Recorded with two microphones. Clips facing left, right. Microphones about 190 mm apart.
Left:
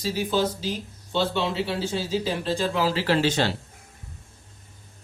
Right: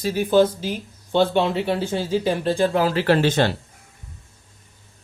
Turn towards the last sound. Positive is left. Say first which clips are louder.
# right 4 dB
turn(degrees=-55)  # may be behind; listen again after turning